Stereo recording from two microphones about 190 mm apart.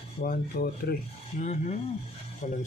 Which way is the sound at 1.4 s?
40° left (ahead or behind).